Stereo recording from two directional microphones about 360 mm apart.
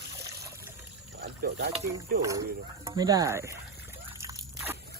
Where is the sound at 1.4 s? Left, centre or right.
Right.